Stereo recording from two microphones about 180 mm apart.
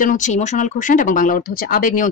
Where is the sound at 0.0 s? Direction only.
45° left (ahead or behind).